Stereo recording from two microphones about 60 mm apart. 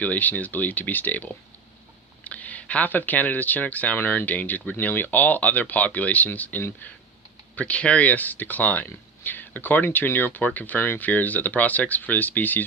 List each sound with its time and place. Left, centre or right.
0.0 s speech: left